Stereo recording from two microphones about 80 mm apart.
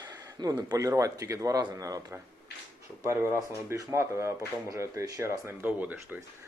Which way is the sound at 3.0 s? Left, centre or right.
Right.